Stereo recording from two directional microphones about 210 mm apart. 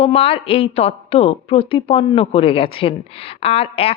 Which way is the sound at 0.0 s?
30° left (ahead or behind).